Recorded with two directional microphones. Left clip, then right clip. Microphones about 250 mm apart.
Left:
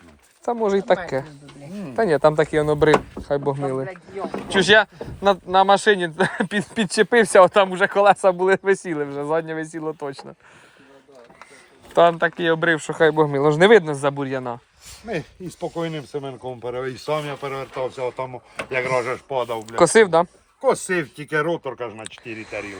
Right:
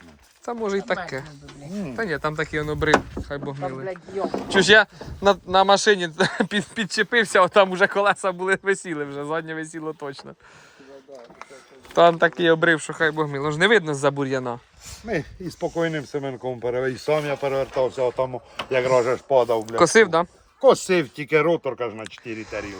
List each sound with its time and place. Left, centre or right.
0.4 s speech: centre
1.7 s speech: right
2.0 s speech: centre
4.2 s speech: centre
6.7 s speech: centre
7.5 s speech: centre
7.9 s speech: centre
11.9 s speech: centre
13.8 s speech: centre
15.1 s speech: right
15.6 s speech: right
19.6 s speech: centre
20.6 s speech: right
21.5 s speech: right